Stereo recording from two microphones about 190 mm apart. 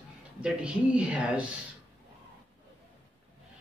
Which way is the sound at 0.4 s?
5° right (ahead or behind).